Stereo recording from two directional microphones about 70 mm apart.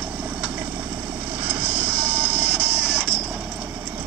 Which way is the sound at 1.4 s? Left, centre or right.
Right.